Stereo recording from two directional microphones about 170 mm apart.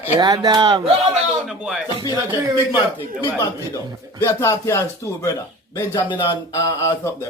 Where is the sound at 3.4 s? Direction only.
20° left (ahead or behind).